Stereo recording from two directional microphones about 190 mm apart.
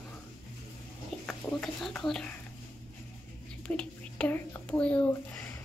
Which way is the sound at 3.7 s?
5° left (ahead or behind).